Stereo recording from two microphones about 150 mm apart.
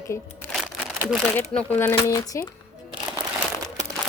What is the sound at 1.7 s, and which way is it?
Speech, 15° left (ahead or behind).